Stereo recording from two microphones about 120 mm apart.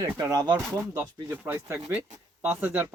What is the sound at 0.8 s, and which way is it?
Speech, 20° right (ahead or behind).